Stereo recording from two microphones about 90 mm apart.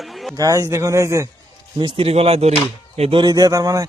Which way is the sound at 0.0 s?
Centre (ahead or behind).